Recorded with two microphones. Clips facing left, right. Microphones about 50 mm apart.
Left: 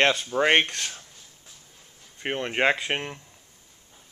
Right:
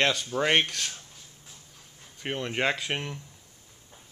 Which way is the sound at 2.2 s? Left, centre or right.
Left.